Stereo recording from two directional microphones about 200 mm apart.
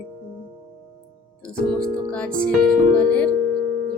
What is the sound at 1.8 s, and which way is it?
Music, 5° left (ahead or behind).